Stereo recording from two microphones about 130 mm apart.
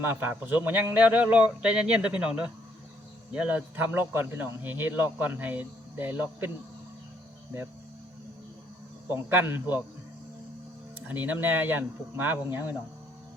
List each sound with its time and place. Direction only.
0.0 s speech: 15° right (ahead or behind)
9.3 s speech: 15° right (ahead or behind)
11.1 s speech: 15° right (ahead or behind)